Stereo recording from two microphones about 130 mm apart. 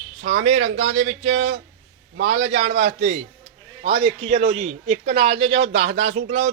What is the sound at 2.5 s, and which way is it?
Speech, 60° right (ahead or behind).